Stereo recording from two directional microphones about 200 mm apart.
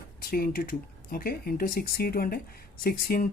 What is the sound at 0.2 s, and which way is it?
Speech, 50° left (ahead or behind).